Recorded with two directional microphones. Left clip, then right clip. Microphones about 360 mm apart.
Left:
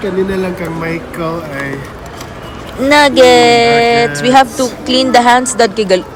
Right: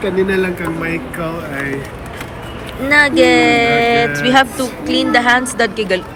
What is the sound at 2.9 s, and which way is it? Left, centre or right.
A woman's voice, centre.